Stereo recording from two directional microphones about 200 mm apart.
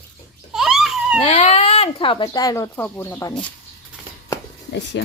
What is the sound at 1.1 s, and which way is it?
Speech, 30° left (ahead or behind).